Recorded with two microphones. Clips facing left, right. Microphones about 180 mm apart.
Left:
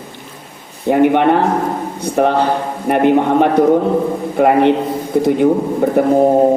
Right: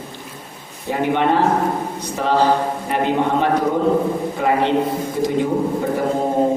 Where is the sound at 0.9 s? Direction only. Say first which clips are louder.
Left 7 dB; 60° left (ahead or behind).